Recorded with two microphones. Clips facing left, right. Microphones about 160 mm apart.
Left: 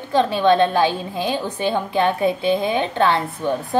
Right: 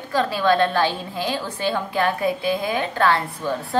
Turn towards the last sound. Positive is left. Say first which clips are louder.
# left 3 dB
turn(degrees=20)  # may be behind; listen again after turning